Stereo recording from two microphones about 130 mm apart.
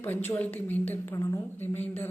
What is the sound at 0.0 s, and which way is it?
A woman's voice, 15° left (ahead or behind).